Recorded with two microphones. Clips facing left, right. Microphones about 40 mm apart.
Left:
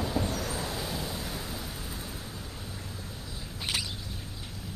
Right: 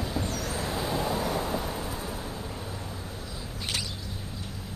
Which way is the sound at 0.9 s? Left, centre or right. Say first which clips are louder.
Right 8 dB; right.